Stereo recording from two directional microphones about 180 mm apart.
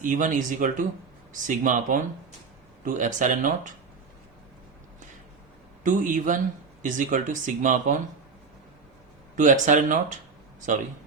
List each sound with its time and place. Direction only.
0.0 s speech: 45° right (ahead or behind)
5.8 s speech: 50° right (ahead or behind)
9.3 s speech: 45° right (ahead or behind)